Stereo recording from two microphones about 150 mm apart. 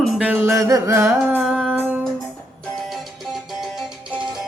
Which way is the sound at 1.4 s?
5° right (ahead or behind).